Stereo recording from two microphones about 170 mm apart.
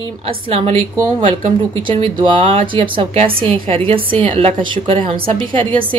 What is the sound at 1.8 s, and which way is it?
Speech, 30° right (ahead or behind).